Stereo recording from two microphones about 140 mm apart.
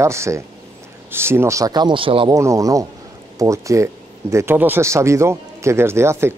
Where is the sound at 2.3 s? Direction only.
20° right (ahead or behind).